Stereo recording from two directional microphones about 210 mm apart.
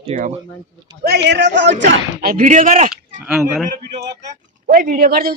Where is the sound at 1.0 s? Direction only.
50° right (ahead or behind).